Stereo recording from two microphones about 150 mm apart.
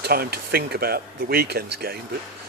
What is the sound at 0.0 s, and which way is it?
Speech, 90° right.